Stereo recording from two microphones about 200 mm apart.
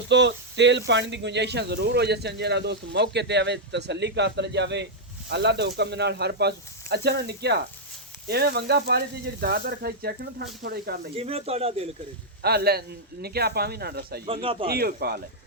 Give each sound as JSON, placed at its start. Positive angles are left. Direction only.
{"t": 0.1, "sound": "speech", "side_deg": -60}
{"t": 11.1, "sound": "speech", "side_deg": -30}
{"t": 12.4, "sound": "speech", "side_deg": -55}
{"t": 14.4, "sound": "speech", "side_deg": -25}
{"t": 14.7, "sound": "speech", "side_deg": -50}